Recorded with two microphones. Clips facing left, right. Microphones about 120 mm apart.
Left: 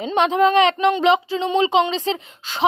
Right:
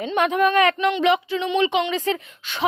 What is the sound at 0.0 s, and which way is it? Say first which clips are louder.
A woman's voice: left 3 dB; 25° left (ahead or behind).